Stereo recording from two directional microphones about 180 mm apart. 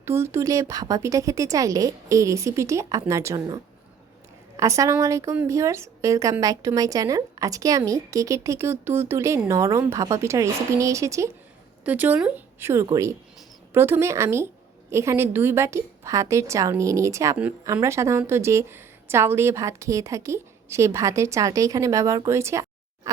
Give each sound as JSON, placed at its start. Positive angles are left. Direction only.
{"t": 0.0, "sound": "a woman's voice", "side_deg": -15}